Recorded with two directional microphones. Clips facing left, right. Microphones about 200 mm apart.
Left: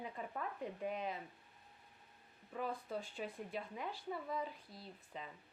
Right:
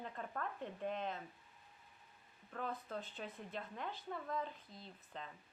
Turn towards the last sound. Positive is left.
turn(degrees=5)  # may be behind; listen again after turning